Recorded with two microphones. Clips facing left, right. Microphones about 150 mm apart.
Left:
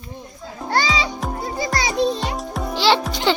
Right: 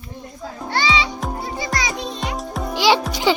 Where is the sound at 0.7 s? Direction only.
40° left (ahead or behind).